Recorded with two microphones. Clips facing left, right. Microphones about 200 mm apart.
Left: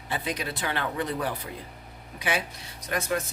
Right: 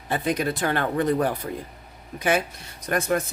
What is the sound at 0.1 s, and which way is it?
Speech, 50° right (ahead or behind).